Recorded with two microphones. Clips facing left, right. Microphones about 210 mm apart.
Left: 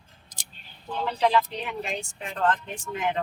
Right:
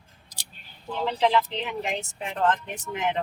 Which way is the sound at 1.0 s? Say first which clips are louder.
Right 1 dB; 20° right (ahead or behind).